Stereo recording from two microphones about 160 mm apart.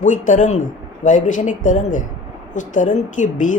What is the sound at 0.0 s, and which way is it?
A woman's voice, 50° left (ahead or behind).